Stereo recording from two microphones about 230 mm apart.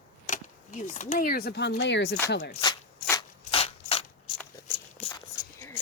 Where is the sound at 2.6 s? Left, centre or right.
Centre.